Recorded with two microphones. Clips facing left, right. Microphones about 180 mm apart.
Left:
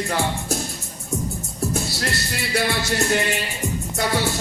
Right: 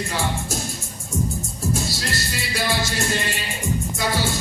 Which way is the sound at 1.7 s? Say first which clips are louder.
Left 1 dB; 60° left (ahead or behind).